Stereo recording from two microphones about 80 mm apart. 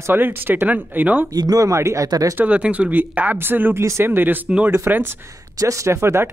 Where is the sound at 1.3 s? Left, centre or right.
Right.